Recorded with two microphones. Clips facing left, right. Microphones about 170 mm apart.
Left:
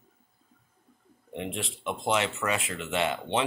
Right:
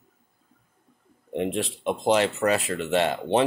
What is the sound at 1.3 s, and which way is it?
Speech, 40° right (ahead or behind).